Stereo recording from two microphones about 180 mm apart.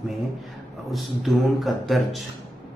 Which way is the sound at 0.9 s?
Centre (ahead or behind).